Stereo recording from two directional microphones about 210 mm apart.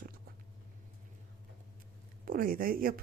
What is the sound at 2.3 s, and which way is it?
Speech, 40° right (ahead or behind).